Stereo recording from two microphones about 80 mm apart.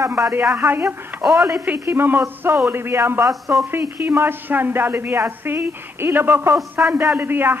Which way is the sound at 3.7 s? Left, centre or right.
Right.